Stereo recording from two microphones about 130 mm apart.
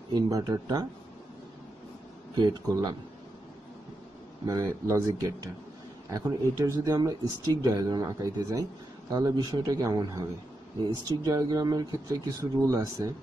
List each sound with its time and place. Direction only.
0.1 s speech: 30° right (ahead or behind)
2.4 s speech: 30° right (ahead or behind)
4.5 s speech: 25° right (ahead or behind)